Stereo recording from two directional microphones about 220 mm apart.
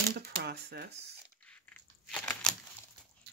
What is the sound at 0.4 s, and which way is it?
Speech, 50° right (ahead or behind).